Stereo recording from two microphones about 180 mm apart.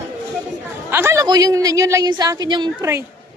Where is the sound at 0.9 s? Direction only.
15° right (ahead or behind).